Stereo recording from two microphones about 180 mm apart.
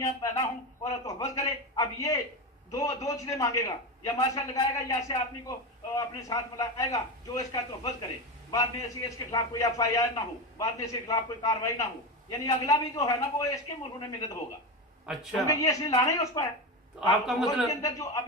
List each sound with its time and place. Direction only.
0.2 s a man's voice: 20° left (ahead or behind)
15.1 s a man's voice: 5° right (ahead or behind)
15.4 s speech: 20° left (ahead or behind)
17.1 s a man's voice: centre (ahead or behind)
17.6 s a man's voice: 20° left (ahead or behind)